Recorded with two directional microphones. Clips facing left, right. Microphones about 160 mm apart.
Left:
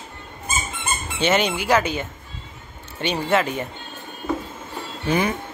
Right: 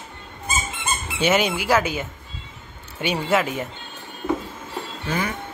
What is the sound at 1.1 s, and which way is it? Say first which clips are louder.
Speech: even; 5° right (ahead or behind).